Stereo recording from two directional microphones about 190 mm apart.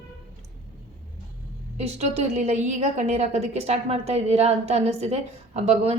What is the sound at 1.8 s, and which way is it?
A woman's voice, 35° right (ahead or behind).